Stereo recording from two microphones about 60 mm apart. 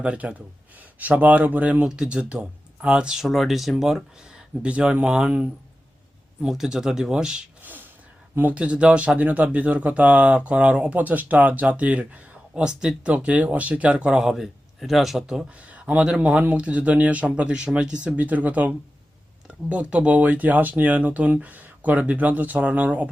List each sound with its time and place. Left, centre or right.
0.0 s speech: centre
1.9 s speech: centre
3.2 s speech: centre
4.6 s speech: centre
6.5 s speech: centre
7.6 s gasp: right
8.4 s speech: right; by 15.4 s centre
15.4 s speech: right